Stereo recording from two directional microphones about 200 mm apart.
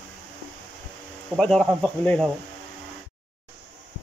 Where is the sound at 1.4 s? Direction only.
Centre (ahead or behind).